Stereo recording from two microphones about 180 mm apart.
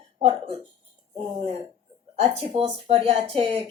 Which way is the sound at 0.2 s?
35° right (ahead or behind).